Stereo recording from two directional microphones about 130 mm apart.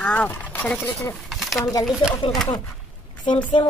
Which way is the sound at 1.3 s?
Centre (ahead or behind).